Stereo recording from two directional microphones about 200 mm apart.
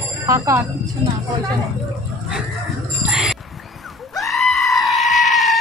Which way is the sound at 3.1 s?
Centre (ahead or behind).